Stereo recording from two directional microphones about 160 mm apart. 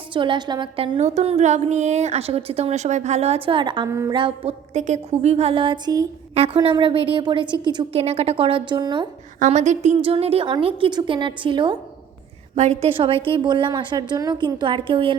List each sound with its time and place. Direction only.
0.1 s a woman's voice: 30° right (ahead or behind)
0.9 s a woman's voice: 45° right (ahead or behind)
4.7 s a woman's voice: 45° right (ahead or behind); by 6.1 s 25° right (ahead or behind)
6.3 s a woman's voice: 35° right (ahead or behind)
7.9 s a woman's voice: 40° right (ahead or behind)
9.4 s a woman's voice: 50° right (ahead or behind); by 11.8 s 30° right (ahead or behind)
12.5 s a woman's voice: 40° right (ahead or behind)